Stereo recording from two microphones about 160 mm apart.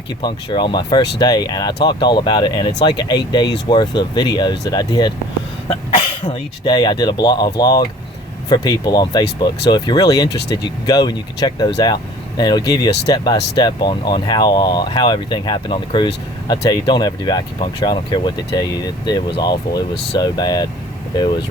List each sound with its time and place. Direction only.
0.2 s speech: 30° left (ahead or behind)
6.7 s speech: 25° left (ahead or behind)